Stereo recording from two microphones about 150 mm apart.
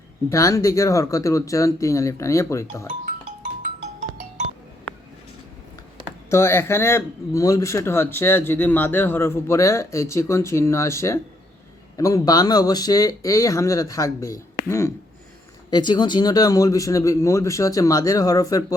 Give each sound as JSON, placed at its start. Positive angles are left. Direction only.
{"t": 0.3, "sound": "speech", "side_deg": 20}
{"t": 2.8, "sound": "music", "side_deg": -60}
{"t": 6.3, "sound": "speech", "side_deg": 15}